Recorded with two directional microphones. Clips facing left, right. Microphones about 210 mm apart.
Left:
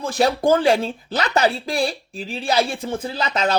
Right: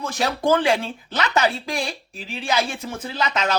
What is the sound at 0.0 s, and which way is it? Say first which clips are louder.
Speech: left 4 dB; 35° left (ahead or behind).